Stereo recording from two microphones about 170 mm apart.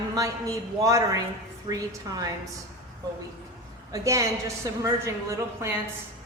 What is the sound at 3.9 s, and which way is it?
Speech, 20° right (ahead or behind).